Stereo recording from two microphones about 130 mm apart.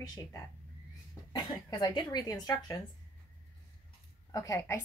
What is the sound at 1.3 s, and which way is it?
Speech, 35° left (ahead or behind).